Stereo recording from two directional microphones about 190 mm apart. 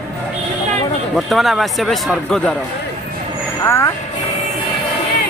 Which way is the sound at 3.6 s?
15° left (ahead or behind).